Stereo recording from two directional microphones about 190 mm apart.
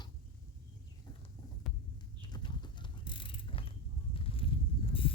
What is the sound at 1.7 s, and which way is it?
Heart sounds, centre (ahead or behind).